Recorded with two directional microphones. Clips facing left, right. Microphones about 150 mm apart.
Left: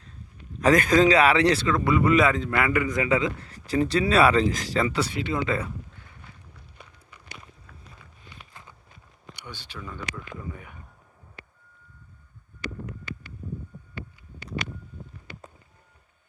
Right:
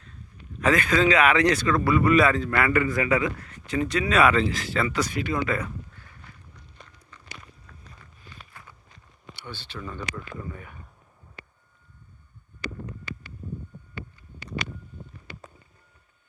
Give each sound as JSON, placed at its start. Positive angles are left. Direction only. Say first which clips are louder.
{"t": 0.6, "sound": "a man's voice", "louder": "left 3 dB", "side_deg": 40}
{"t": 6.8, "sound": "walk", "louder": "left 1 dB", "side_deg": 10}
{"t": 9.3, "sound": "speech", "louder": "right 2 dB", "side_deg": 15}